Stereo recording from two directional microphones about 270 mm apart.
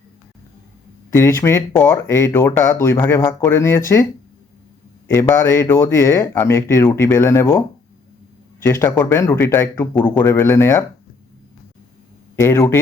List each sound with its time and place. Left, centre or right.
1.1 s speech: centre
5.0 s speech: centre
8.6 s speech: centre
12.4 s speech: centre